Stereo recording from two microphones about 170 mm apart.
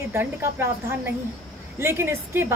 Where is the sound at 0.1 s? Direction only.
15° right (ahead or behind).